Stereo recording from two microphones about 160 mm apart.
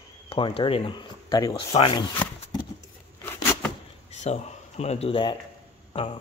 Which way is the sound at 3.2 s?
15° left (ahead or behind).